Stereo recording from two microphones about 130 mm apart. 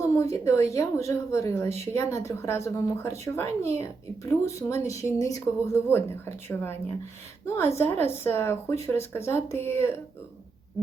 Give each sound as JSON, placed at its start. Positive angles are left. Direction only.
{"t": 0.0, "sound": "speech", "side_deg": 25}